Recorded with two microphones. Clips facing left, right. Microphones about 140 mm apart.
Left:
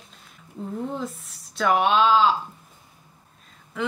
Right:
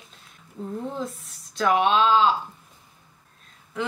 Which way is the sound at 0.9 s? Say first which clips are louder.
Left 1 dB; centre (ahead or behind).